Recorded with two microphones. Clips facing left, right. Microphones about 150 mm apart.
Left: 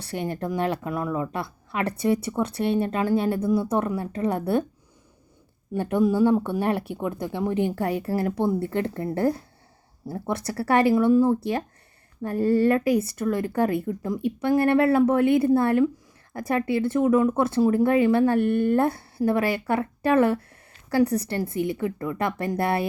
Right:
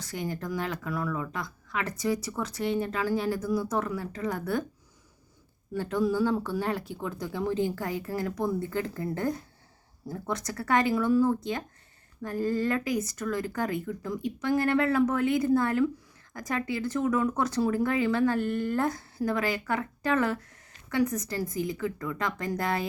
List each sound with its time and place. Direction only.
0.0 s speech: 65° left (ahead or behind)
0.3 s speech: 30° left (ahead or behind)
1.8 s a woman's voice: 65° left (ahead or behind)
2.0 s speech: 25° left (ahead or behind)
5.7 s speech: 20° left (ahead or behind)